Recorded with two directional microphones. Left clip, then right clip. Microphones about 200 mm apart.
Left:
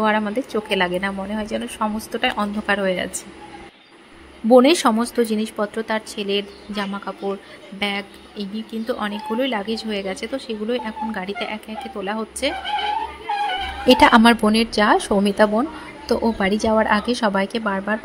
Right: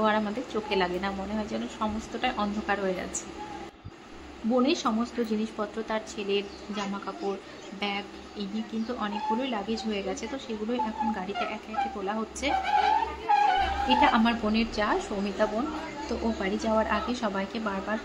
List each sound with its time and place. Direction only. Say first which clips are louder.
0.0 s a woman's voice: left 7 dB; 30° left (ahead or behind)
4.5 s a woman's voice: left 13 dB; 45° left (ahead or behind); by 12.5 s 30° left (ahead or behind)
13.8 s speech: left 12 dB; 50° left (ahead or behind)